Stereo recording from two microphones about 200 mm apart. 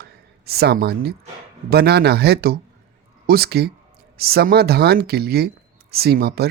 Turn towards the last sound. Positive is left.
turn(degrees=-50)  # may be behind; listen again after turning